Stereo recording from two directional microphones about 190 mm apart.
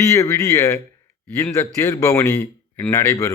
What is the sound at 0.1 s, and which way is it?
Speech, 15° left (ahead or behind).